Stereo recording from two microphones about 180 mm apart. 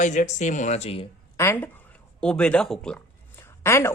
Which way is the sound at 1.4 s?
10° left (ahead or behind).